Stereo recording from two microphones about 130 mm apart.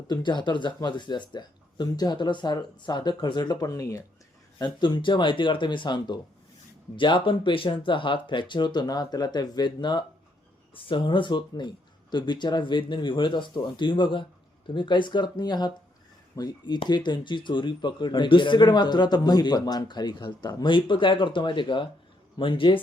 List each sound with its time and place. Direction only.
0.1 s speech: 35° left (ahead or behind)